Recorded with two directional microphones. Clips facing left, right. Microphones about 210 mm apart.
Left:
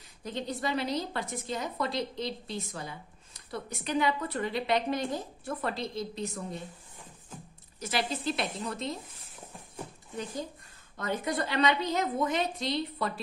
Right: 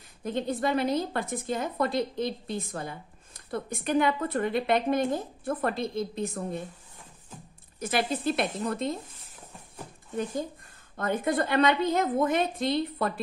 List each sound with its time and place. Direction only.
0.2 s a woman's voice: 55° right (ahead or behind)
7.8 s a woman's voice: 55° right (ahead or behind)
11.0 s a woman's voice: 50° right (ahead or behind)